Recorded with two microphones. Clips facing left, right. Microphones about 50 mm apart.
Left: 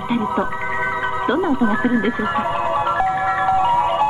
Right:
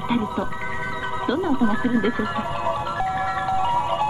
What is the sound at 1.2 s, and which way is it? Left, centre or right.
Speech, left.